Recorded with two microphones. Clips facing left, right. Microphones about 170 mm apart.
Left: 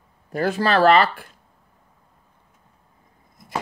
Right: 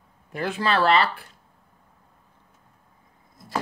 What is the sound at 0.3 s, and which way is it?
Speech, 40° left (ahead or behind).